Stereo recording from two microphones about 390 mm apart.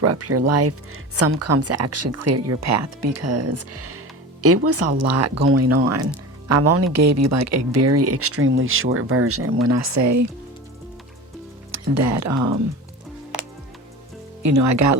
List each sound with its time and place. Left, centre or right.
0.0 s speech: right
11.7 s speech: right
14.4 s speech: right